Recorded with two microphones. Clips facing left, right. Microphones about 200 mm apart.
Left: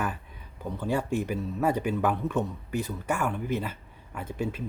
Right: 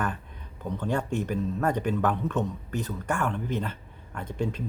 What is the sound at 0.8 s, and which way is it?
Speech, 5° left (ahead or behind).